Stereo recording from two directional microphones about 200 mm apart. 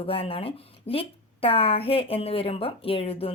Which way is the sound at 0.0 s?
30° left (ahead or behind).